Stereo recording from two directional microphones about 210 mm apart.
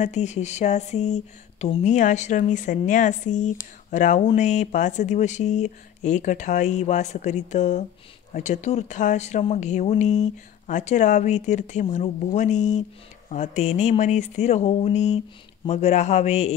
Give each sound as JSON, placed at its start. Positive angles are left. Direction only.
{"t": 0.0, "sound": "speech", "side_deg": 35}